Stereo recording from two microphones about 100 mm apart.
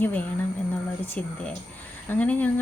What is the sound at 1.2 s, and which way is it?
Speech, 15° left (ahead or behind).